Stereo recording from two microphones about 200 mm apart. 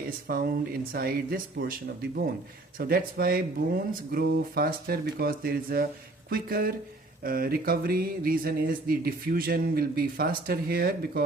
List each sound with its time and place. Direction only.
0.3 s speech: 50° right (ahead or behind)